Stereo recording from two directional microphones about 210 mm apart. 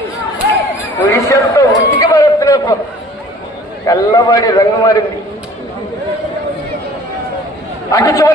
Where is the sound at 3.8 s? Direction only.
15° left (ahead or behind).